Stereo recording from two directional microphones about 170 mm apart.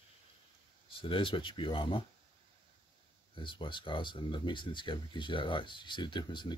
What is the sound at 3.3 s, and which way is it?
Speech, 30° left (ahead or behind).